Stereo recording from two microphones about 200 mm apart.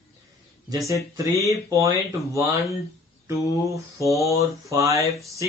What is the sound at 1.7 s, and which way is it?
Speech, 15° right (ahead or behind).